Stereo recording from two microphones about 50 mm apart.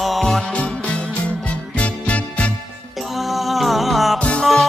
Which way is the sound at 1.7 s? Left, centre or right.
Left.